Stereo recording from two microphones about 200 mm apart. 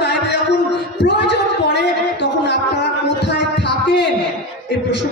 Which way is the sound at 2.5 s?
60° left (ahead or behind).